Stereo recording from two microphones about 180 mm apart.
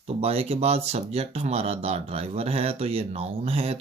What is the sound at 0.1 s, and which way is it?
Speech, 35° right (ahead or behind).